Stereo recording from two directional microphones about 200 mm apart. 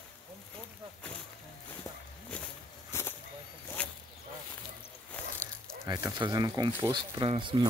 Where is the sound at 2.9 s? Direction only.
10° left (ahead or behind).